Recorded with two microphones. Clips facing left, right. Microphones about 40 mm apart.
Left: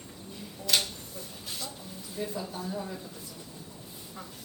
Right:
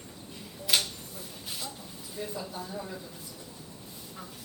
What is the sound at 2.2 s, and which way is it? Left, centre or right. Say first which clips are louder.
Speech: left 2 dB; centre.